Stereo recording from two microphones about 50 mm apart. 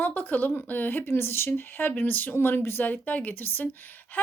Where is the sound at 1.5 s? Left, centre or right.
Left.